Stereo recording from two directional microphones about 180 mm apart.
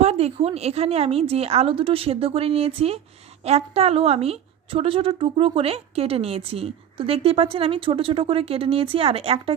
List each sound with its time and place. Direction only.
0.0 s a woman's voice: 35° right (ahead or behind)